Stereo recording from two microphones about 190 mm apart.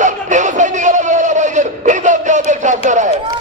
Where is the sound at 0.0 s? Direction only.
40° right (ahead or behind).